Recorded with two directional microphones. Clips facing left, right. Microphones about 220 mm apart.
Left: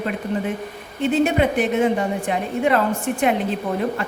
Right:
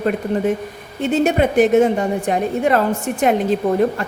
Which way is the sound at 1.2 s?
45° right (ahead or behind).